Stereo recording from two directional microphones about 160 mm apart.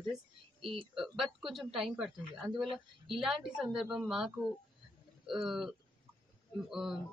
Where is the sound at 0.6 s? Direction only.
35° right (ahead or behind).